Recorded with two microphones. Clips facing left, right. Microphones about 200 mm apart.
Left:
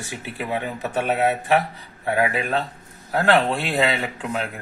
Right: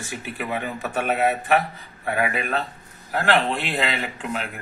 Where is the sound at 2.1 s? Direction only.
25° left (ahead or behind).